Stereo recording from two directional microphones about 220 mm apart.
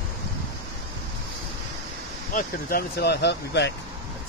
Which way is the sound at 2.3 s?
45° left (ahead or behind).